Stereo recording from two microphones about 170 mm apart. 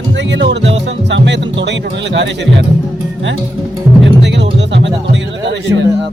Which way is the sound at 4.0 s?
90° right.